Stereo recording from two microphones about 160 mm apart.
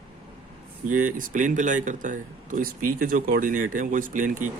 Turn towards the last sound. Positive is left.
turn(degrees=-55)  # may be behind; listen again after turning